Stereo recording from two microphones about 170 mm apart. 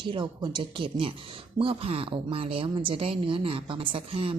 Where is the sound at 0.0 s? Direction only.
30° right (ahead or behind).